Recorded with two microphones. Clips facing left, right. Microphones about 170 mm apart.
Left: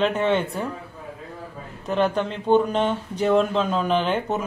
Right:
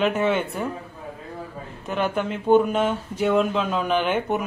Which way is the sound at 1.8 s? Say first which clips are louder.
Left 2 dB; 5° right (ahead or behind).